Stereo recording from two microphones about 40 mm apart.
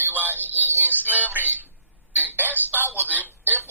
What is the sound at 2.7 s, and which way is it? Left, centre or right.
Speech, right.